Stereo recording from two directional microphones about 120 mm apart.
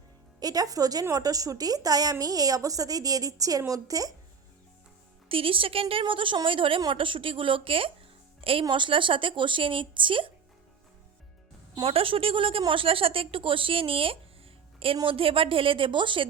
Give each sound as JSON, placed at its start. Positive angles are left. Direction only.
{"t": 0.3, "sound": "a woman's voice", "side_deg": -30}
{"t": 5.3, "sound": "a woman's voice", "side_deg": -50}
{"t": 11.7, "sound": "a woman's voice", "side_deg": -50}